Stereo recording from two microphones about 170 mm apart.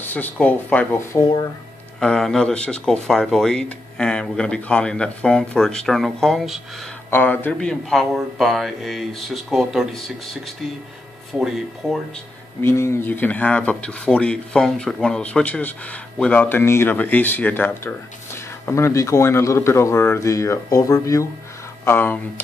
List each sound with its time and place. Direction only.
0.0 s speech: 10° left (ahead or behind)
7.1 s speech: 10° left (ahead or behind)
11.3 s speech: centre (ahead or behind)
12.6 s speech: 15° left (ahead or behind)